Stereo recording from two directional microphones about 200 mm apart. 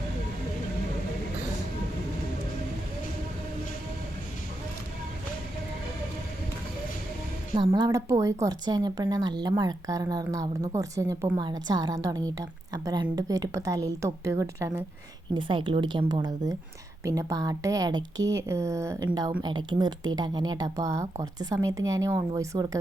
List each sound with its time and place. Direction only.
7.5 s a woman's voice: 20° right (ahead or behind)